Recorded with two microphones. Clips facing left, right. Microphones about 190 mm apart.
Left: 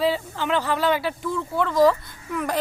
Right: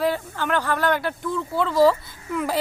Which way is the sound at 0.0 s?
10° left (ahead or behind).